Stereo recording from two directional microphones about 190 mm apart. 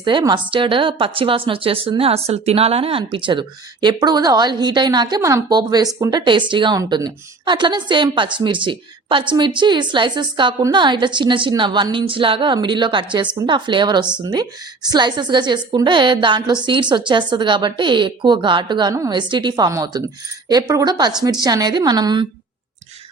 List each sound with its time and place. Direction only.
0.0 s a woman's voice: 25° right (ahead or behind)